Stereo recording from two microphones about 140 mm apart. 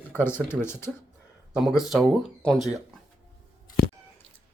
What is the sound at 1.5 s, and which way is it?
Speech, 5° right (ahead or behind).